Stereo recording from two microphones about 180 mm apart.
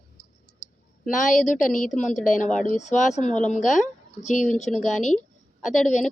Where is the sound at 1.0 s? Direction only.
45° left (ahead or behind).